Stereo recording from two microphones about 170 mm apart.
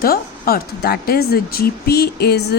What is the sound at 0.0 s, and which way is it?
A woman's voice, 60° left (ahead or behind).